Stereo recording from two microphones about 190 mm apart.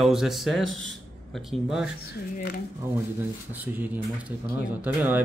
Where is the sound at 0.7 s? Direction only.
80° right.